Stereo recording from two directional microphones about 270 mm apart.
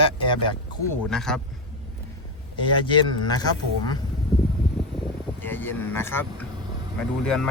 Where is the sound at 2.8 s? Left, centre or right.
Centre.